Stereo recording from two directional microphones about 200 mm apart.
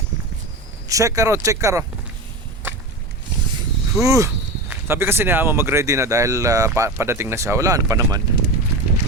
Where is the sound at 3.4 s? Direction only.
20° right (ahead or behind).